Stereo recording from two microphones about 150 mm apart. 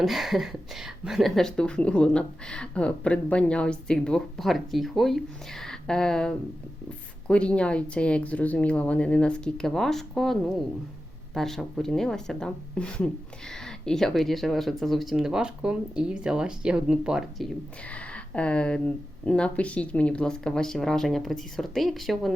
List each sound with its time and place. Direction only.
0.0 s speech: centre (ahead or behind)